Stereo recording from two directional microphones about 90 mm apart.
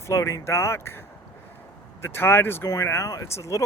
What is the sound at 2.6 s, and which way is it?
Speech, 35° left (ahead or behind).